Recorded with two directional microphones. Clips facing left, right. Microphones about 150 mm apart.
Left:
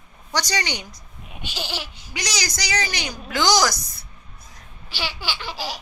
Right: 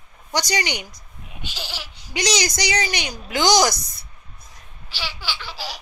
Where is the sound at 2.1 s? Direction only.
25° right (ahead or behind).